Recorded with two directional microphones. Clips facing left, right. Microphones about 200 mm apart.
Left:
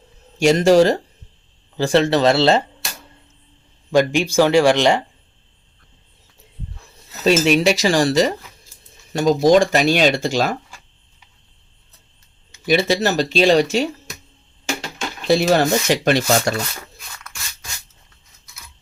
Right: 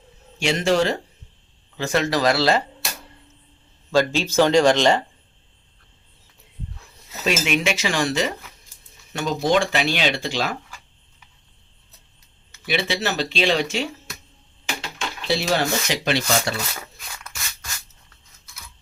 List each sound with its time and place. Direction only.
0.3 s speech: 40° left (ahead or behind); by 2.6 s 25° left (ahead or behind)
3.9 s speech: 15° left (ahead or behind)
7.3 s speech: 35° left (ahead or behind)
12.6 s speech: 40° left (ahead or behind)
15.3 s speech: 45° left (ahead or behind)